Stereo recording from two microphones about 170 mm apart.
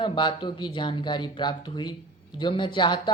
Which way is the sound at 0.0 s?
30° left (ahead or behind).